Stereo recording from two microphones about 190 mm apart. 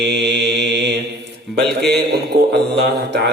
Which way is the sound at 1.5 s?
60° right (ahead or behind).